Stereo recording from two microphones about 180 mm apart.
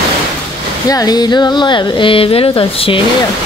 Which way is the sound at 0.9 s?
20° left (ahead or behind).